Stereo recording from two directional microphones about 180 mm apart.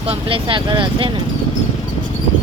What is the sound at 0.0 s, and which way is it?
Speech, 30° right (ahead or behind).